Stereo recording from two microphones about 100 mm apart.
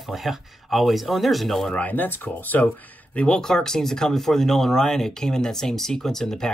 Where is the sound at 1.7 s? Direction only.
15° left (ahead or behind).